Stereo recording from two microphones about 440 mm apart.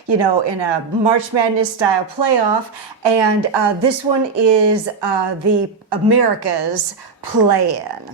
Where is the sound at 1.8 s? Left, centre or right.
Right.